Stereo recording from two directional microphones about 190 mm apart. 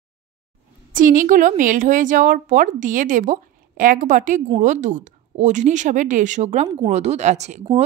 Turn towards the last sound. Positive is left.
turn(degrees=-35)  # may be behind; listen again after turning